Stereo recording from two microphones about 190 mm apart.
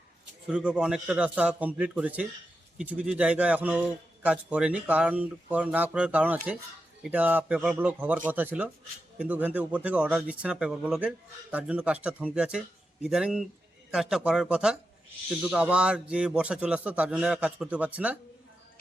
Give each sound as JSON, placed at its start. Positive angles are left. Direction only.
{"t": 0.5, "sound": "a man's voice", "side_deg": -5}